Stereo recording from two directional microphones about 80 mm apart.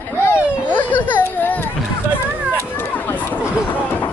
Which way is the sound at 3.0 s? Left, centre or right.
Left.